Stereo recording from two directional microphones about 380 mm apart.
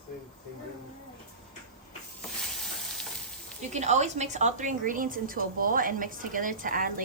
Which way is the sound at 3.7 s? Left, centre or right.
Centre.